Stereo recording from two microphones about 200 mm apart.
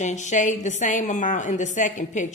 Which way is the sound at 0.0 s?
35° left (ahead or behind).